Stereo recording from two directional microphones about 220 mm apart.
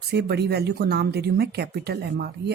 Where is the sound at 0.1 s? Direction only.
50° right (ahead or behind).